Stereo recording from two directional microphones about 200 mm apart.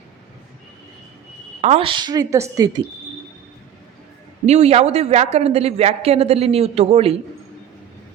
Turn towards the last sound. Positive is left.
turn(degrees=-30)  # may be behind; listen again after turning